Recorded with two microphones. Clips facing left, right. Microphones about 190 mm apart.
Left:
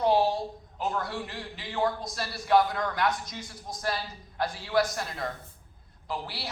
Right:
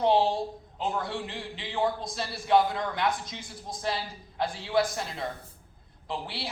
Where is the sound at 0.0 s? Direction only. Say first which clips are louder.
Even; 25° right (ahead or behind).